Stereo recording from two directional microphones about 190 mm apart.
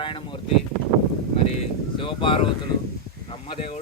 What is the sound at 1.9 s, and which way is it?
Speech, 25° left (ahead or behind).